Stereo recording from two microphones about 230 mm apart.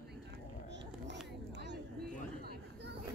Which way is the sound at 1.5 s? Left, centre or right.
Right.